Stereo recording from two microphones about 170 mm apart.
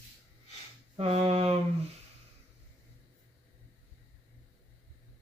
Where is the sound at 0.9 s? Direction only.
35° right (ahead or behind).